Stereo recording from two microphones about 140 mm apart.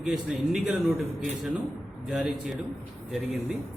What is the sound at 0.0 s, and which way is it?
Speech, 5° right (ahead or behind).